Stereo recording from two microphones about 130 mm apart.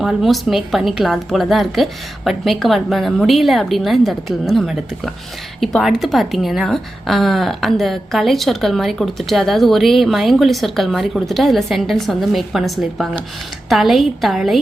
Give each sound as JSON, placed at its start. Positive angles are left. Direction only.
{"t": 0.0, "sound": "a woman's voice", "side_deg": -5}